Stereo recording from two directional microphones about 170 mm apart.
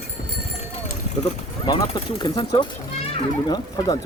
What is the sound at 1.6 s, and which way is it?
Speech, 25° left (ahead or behind).